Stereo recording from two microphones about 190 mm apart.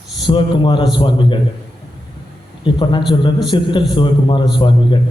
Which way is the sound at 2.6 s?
25° left (ahead or behind).